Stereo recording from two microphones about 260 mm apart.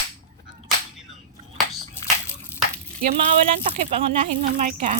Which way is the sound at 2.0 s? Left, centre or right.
Centre.